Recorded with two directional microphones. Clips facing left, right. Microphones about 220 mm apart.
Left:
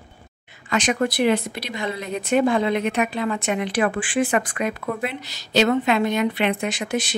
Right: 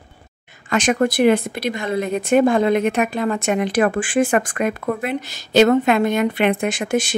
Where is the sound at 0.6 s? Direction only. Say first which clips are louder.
Right 4 dB; 50° right (ahead or behind).